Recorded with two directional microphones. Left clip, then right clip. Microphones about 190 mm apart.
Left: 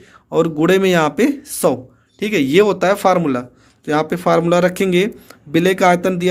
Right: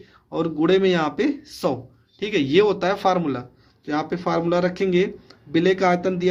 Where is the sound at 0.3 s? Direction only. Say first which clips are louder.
Left 6 dB; 35° left (ahead or behind).